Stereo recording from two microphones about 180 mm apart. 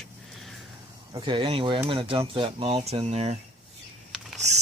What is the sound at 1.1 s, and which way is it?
Speech, 25° right (ahead or behind).